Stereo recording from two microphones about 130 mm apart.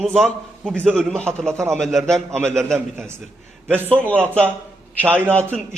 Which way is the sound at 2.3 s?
20° right (ahead or behind).